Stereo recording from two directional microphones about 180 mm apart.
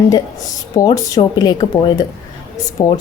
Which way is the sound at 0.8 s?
20° left (ahead or behind).